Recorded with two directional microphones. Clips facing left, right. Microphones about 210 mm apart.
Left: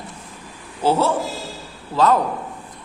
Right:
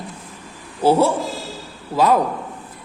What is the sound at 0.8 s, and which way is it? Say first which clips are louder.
Speech: right 3 dB; 10° right (ahead or behind).